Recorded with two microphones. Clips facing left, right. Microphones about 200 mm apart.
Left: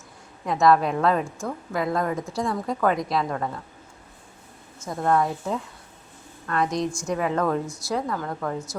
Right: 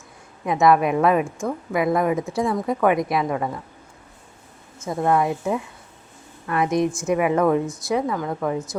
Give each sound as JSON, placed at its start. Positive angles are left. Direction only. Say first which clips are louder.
{"t": 0.4, "sound": "a woman's voice", "louder": "right 2 dB", "side_deg": 0}
{"t": 1.9, "sound": "a woman's voice", "louder": "right 5 dB", "side_deg": -15}
{"t": 2.1, "sound": "a woman's voice", "louder": "right 4 dB", "side_deg": 0}
{"t": 4.9, "sound": "a woman's voice", "louder": "right 2 dB", "side_deg": -10}